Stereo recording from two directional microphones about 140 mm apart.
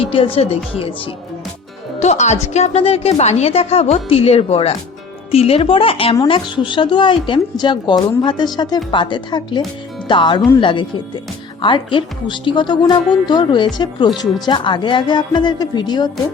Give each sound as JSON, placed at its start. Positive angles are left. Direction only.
{"t": 0.0, "sound": "speech", "side_deg": 40}
{"t": 2.0, "sound": "speech", "side_deg": 55}